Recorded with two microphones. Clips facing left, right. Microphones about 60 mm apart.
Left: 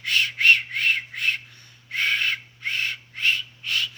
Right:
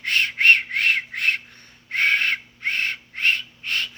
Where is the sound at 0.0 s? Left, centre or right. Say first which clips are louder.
Right 2 dB; right.